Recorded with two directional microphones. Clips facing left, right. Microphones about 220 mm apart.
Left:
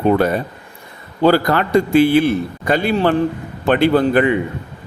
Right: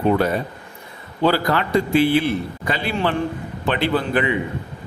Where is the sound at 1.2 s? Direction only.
45° left (ahead or behind).